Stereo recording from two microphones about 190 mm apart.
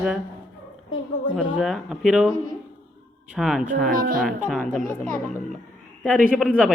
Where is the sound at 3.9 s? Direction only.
45° right (ahead or behind).